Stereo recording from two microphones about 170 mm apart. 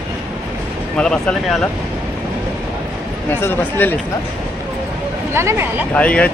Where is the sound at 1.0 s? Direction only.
5° left (ahead or behind).